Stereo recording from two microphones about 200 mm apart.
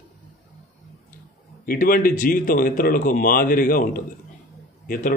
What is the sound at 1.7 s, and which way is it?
Speech, 45° left (ahead or behind).